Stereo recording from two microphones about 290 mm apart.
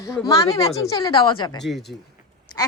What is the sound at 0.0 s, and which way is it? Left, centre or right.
A woman's voice, centre.